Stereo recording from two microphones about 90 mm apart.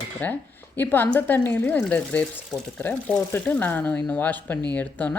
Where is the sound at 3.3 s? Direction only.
20° left (ahead or behind).